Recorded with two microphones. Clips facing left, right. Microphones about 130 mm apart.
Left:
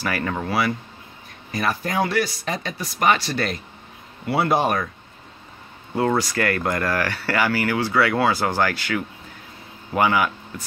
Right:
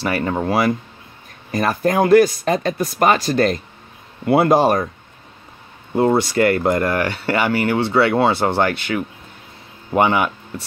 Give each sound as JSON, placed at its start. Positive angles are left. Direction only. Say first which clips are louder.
{"t": 0.0, "sound": "speech", "louder": "right 5 dB", "side_deg": -25}
{"t": 0.5, "sound": "speech", "louder": "right 5 dB", "side_deg": -40}
{"t": 5.9, "sound": "speech", "louder": "right 5 dB", "side_deg": -25}